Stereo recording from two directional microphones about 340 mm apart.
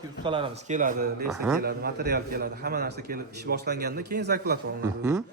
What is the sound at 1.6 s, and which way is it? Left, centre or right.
A man's voice, right.